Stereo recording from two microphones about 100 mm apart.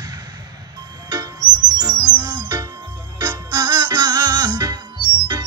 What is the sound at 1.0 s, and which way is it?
Music, 40° right (ahead or behind).